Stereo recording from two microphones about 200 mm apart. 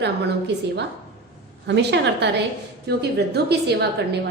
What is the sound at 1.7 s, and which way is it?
A woman's voice, 60° right (ahead or behind).